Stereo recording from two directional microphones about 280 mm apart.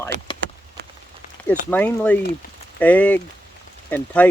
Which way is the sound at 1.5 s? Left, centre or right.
Centre.